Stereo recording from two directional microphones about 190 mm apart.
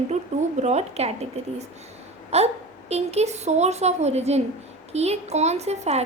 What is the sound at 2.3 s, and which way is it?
A woman's voice, 35° right (ahead or behind).